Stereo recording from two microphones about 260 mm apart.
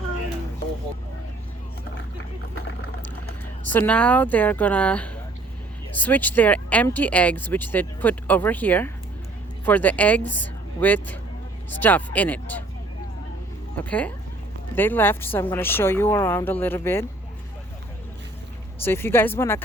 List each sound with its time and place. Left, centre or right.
3.7 s speech: centre
10.2 s a woman's voice: left
10.8 s speech: centre
13.7 s speech: centre
18.9 s speech: centre